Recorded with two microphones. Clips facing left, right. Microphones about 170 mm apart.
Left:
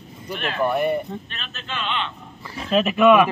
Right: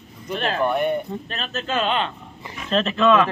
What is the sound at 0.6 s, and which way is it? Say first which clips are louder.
Speech: left 2 dB; 5° left (ahead or behind).